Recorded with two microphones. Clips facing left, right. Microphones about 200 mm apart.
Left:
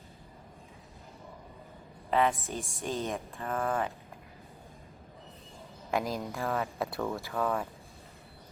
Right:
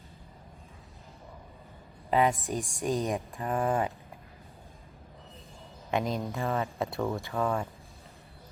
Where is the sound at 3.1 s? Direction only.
15° right (ahead or behind).